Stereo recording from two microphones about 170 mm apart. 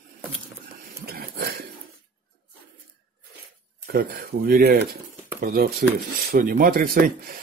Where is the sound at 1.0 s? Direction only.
70° right (ahead or behind).